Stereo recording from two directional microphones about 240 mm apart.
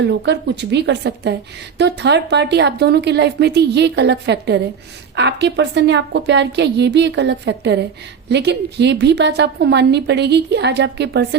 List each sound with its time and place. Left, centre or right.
0.0 s a woman's voice: right